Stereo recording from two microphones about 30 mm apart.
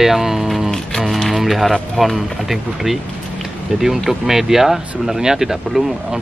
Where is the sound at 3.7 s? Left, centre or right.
Centre.